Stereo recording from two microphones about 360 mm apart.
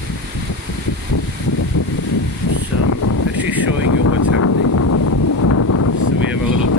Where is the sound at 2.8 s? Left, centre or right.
Left.